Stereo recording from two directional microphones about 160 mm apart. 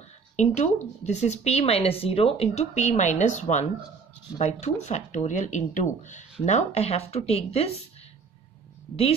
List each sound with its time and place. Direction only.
0.4 s speech: 45° left (ahead or behind)